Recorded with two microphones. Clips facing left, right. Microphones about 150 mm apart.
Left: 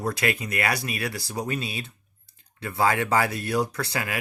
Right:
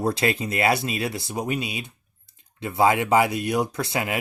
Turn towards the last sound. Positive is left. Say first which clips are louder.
# right 3 dB
turn(degrees=-20)  # may be behind; listen again after turning